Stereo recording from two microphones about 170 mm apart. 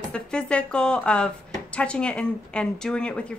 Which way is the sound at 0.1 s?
5° left (ahead or behind).